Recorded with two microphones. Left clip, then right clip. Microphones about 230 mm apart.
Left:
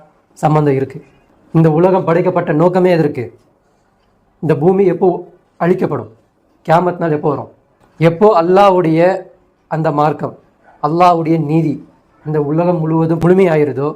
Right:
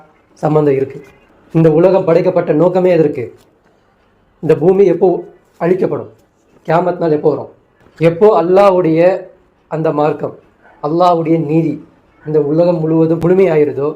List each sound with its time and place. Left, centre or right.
0.3 s a man's voice: left
4.4 s a man's voice: left
8.0 s speech: left
12.3 s a man's voice: left